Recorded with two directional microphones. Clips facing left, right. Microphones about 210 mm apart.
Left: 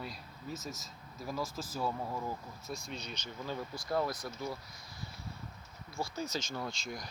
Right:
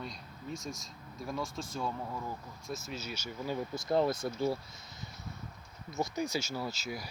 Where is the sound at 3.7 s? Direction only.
25° right (ahead or behind).